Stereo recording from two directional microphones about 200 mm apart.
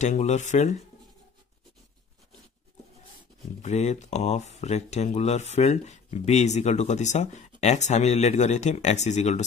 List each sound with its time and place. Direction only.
0.0 s speech: 35° left (ahead or behind)
3.6 s speech: 35° left (ahead or behind)